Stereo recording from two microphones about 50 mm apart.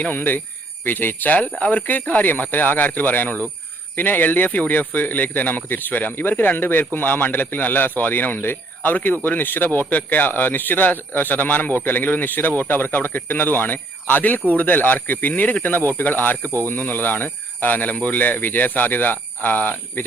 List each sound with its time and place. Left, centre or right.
0.0 s speech: left
1.5 s speech: left